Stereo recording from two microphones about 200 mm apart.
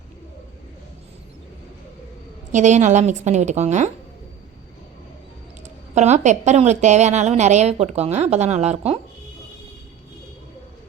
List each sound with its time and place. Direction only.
2.5 s a woman's voice: 35° right (ahead or behind)
5.9 s a woman's voice: 35° right (ahead or behind)